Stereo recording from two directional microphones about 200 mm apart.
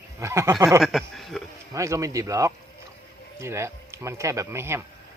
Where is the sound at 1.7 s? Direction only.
15° right (ahead or behind).